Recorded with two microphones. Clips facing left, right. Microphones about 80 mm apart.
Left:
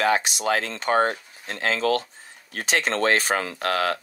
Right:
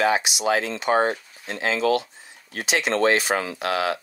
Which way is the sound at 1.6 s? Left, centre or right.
Left.